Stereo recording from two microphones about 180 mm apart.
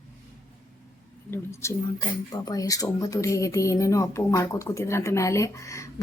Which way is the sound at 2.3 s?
20° left (ahead or behind).